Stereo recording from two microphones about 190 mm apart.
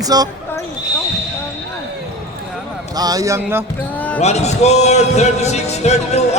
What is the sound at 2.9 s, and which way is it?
Speech, 20° right (ahead or behind).